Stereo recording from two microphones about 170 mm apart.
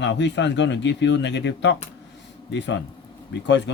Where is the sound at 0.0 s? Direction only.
90° left.